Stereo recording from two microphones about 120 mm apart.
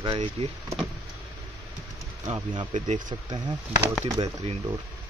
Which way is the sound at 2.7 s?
80° right.